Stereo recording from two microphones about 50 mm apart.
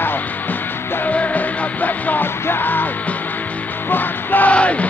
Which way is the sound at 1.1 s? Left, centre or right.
Left.